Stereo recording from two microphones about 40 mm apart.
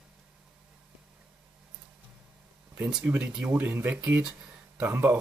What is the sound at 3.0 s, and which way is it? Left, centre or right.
Speech, right.